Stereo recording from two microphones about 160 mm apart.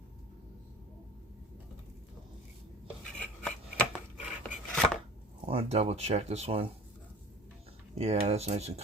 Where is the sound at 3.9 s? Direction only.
5° right (ahead or behind).